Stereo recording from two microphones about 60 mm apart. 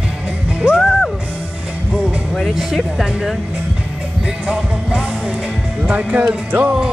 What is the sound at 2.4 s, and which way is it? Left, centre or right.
Speech, centre.